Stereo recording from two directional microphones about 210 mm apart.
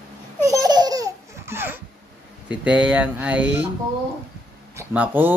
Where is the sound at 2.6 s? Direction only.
5° right (ahead or behind).